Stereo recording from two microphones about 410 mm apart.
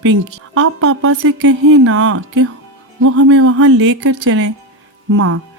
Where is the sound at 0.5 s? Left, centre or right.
Right.